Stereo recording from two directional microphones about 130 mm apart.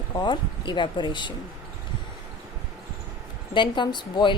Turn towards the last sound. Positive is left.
turn(degrees=35)  # may be behind; listen again after turning